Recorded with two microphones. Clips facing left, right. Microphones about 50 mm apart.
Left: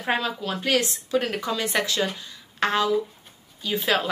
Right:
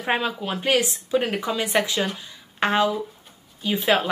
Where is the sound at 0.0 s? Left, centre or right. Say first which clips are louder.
Right 1 dB; right.